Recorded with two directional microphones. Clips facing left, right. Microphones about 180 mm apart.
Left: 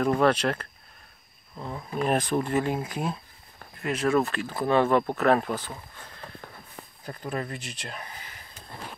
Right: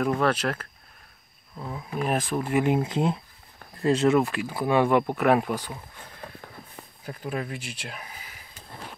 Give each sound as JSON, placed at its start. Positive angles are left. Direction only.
{"t": 0.0, "sound": "speech", "side_deg": 0}
{"t": 2.5, "sound": "speech", "side_deg": -20}
{"t": 4.2, "sound": "speech", "side_deg": -10}
{"t": 7.1, "sound": "speech", "side_deg": -5}